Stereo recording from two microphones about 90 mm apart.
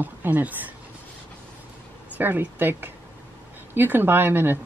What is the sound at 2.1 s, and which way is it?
Speech, 20° right (ahead or behind).